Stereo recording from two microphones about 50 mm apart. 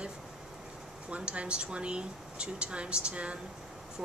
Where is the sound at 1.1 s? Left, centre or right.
Right.